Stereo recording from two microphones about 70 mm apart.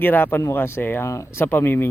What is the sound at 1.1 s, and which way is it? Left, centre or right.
Speech, left.